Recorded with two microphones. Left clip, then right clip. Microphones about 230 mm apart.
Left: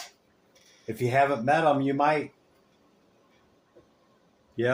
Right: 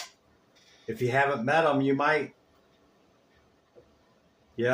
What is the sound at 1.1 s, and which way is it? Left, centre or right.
Speech, left.